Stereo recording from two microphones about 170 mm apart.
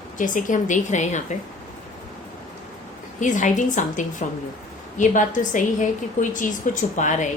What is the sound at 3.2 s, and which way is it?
A woman's voice, 45° left (ahead or behind).